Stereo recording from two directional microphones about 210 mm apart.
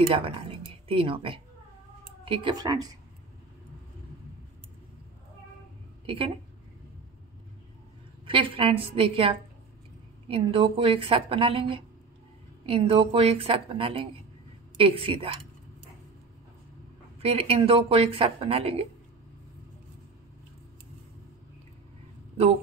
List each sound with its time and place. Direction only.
0.1 s speech: 25° right (ahead or behind)
6.0 s a woman's voice: 25° right (ahead or behind)
8.3 s speech: 25° right (ahead or behind)
17.2 s speech: 30° right (ahead or behind)